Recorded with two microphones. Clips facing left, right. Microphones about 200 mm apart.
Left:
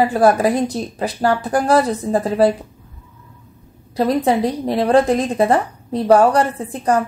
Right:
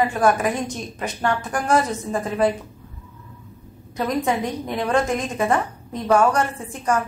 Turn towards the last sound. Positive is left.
turn(degrees=35)  # may be behind; listen again after turning